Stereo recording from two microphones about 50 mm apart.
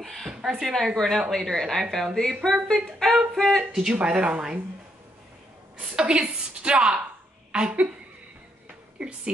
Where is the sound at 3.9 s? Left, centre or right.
Right.